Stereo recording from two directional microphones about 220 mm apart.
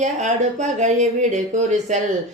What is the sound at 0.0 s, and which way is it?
Speech, 35° right (ahead or behind).